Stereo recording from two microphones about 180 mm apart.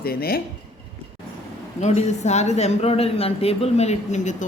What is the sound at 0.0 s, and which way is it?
Speech, 55° left (ahead or behind).